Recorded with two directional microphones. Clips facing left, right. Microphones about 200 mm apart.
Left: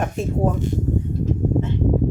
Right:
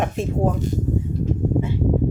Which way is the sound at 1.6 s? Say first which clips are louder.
Even; 10° right (ahead or behind).